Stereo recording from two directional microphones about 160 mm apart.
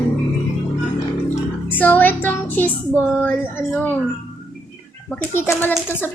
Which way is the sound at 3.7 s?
10° left (ahead or behind).